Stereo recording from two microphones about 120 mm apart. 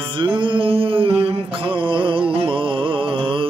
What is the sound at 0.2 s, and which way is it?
Mantra, 45° right (ahead or behind).